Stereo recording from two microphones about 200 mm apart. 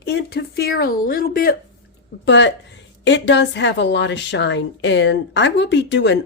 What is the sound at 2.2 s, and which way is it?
A woman's voice, 60° left (ahead or behind).